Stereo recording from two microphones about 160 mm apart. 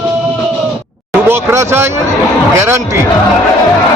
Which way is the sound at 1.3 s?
15° right (ahead or behind).